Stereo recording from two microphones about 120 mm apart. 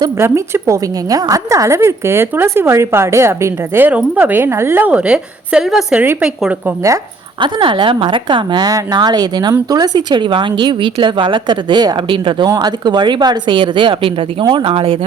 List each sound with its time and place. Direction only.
0.2 s a woman's voice: 20° right (ahead or behind)
6.7 s a woman's voice: 25° right (ahead or behind)
7.4 s a woman's voice: 40° right (ahead or behind)
12.5 s a woman's voice: 35° right (ahead or behind); by 14.9 s 50° right (ahead or behind)